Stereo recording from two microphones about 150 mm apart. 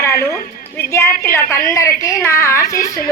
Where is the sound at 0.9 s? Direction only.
15° left (ahead or behind).